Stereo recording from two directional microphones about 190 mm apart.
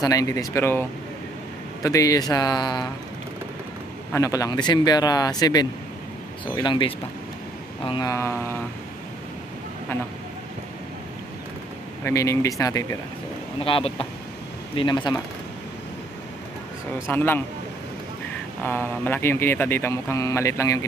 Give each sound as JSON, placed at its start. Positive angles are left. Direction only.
{"t": 0.0, "sound": "speech", "side_deg": 20}
{"t": 4.1, "sound": "speech", "side_deg": 15}
{"t": 12.0, "sound": "speech", "side_deg": 15}
{"t": 13.7, "sound": "speech", "side_deg": 30}
{"t": 17.1, "sound": "speech", "side_deg": 10}
{"t": 18.6, "sound": "speech", "side_deg": 10}